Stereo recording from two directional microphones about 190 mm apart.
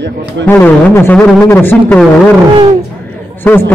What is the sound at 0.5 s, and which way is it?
Speech, 10° left (ahead or behind).